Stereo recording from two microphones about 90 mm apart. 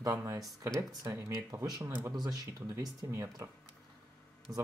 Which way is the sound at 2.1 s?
50° right (ahead or behind).